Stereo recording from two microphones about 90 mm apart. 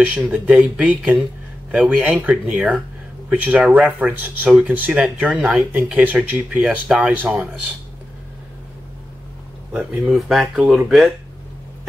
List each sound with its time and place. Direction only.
0.0 s speech: 15° right (ahead or behind)
9.8 s speech: 10° right (ahead or behind)